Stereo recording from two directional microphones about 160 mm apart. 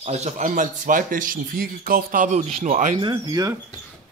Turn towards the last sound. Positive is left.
turn(degrees=-20)  # may be behind; listen again after turning